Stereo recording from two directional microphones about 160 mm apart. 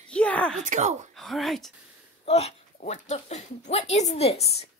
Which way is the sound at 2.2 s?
40° left (ahead or behind).